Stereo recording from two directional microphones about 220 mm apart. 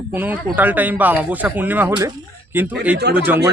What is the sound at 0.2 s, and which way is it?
Speech, 10° right (ahead or behind).